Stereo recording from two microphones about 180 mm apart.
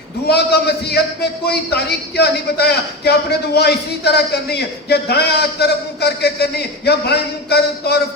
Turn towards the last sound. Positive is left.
turn(degrees=65)  # may be behind; listen again after turning